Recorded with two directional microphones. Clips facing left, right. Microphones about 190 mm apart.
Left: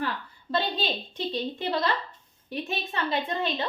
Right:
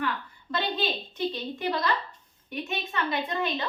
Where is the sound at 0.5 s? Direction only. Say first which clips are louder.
Left 1 dB; 30° left (ahead or behind).